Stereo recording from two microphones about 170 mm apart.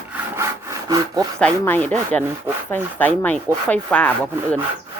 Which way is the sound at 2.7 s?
10° left (ahead or behind).